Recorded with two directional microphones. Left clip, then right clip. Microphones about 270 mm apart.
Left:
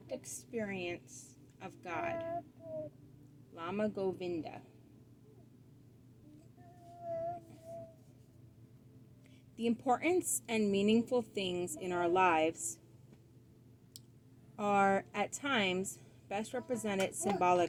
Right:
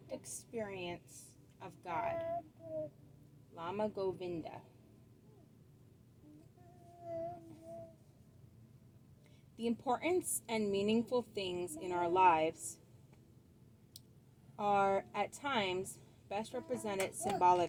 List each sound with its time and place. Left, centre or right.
0.1 s a sound: left
1.5 s a woman's voice: left
3.5 s a woman's voice: left
9.6 s a woman's voice: left
14.5 s a woman's voice: left